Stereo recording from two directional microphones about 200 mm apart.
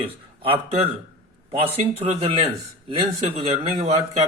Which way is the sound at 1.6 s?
30° right (ahead or behind).